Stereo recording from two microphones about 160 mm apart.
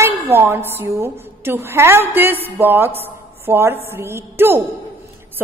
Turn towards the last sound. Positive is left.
turn(degrees=-15)  # may be behind; listen again after turning